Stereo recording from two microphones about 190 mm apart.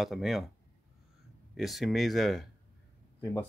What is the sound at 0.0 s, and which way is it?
Speech, centre (ahead or behind).